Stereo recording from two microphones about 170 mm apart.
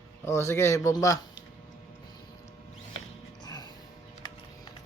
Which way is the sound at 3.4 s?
25° left (ahead or behind).